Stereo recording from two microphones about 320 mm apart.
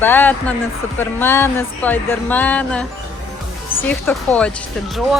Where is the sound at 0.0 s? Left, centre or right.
Centre.